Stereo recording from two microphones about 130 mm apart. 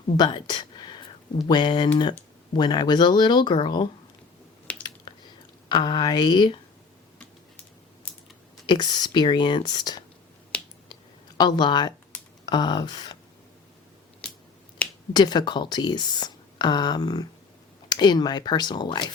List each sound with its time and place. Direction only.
0.2 s a sound: 35° left (ahead or behind)
1.5 s speech: 35° left (ahead or behind)
4.7 s a sound: 10° left (ahead or behind)
5.6 s speech: 35° left (ahead or behind)
8.6 s speech: 35° left (ahead or behind)
10.5 s finger snapping: 10° left (ahead or behind)
11.3 s speech: 35° left (ahead or behind)
14.2 s finger snapping: 10° left (ahead or behind)
15.1 s speech: 35° left (ahead or behind)